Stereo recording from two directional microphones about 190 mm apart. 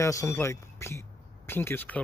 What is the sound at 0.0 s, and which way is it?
Speech, 15° left (ahead or behind).